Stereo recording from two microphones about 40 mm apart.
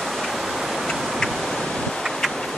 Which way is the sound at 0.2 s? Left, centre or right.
Centre.